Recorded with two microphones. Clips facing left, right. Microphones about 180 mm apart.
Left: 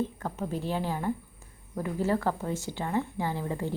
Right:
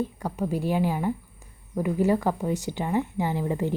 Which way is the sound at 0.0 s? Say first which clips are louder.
Right 3 dB; 10° right (ahead or behind).